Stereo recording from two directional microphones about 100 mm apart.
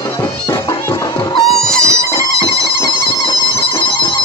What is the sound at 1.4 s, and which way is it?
Music, centre (ahead or behind).